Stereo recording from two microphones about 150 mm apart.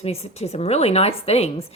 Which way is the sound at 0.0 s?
45° left (ahead or behind).